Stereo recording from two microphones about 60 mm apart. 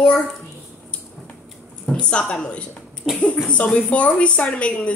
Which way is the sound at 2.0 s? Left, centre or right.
Centre.